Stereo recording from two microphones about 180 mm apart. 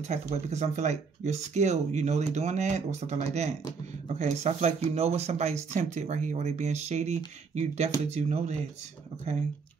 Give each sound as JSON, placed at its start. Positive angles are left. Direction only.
{"t": 0.0, "sound": "speech", "side_deg": -40}